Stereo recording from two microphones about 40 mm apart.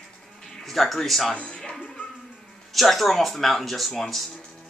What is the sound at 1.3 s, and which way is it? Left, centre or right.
Speech, left.